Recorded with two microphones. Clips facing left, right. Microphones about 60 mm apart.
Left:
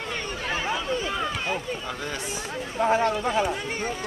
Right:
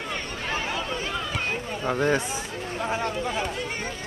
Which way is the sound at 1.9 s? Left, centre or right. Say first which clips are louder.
Right 9 dB; right.